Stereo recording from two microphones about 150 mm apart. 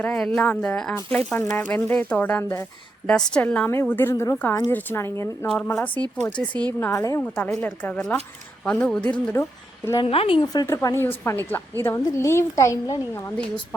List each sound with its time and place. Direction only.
0.0 s speech: 10° left (ahead or behind)
5.5 s a woman's voice: 5° left (ahead or behind); by 7.2 s 20° left (ahead or behind)
7.2 s a woman's voice: 10° left (ahead or behind)
10.0 s speech: 40° left (ahead or behind)
10.4 s a woman's voice: 25° left (ahead or behind)